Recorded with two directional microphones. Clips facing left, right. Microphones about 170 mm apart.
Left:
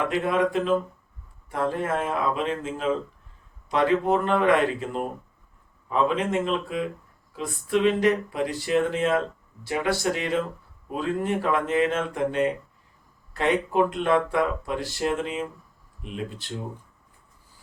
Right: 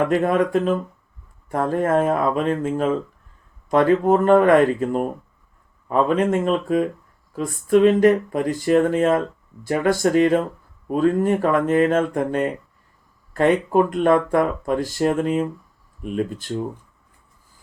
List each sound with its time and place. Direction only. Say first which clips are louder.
0.1 s speech: right 5 dB; 45° right (ahead or behind)